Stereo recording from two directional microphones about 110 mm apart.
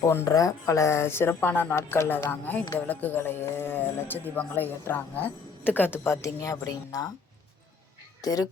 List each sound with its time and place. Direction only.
0.0 s a man's voice: 25° left (ahead or behind)
8.2 s speech: 35° left (ahead or behind)